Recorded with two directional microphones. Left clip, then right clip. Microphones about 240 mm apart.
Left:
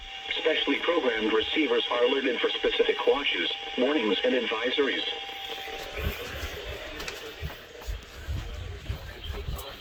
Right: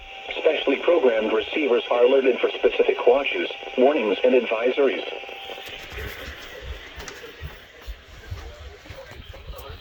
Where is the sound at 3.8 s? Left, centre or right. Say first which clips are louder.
Right 7 dB; right.